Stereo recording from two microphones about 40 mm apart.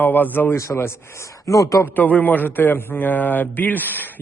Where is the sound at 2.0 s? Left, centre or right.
Left.